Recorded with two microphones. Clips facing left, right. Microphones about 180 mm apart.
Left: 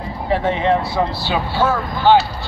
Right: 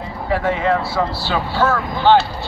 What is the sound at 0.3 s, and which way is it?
Speech, 25° left (ahead or behind).